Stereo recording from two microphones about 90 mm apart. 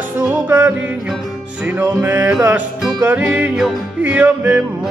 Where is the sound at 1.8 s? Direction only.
20° right (ahead or behind).